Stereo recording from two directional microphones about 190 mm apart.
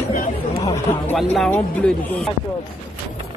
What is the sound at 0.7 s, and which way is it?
Speech, 10° left (ahead or behind).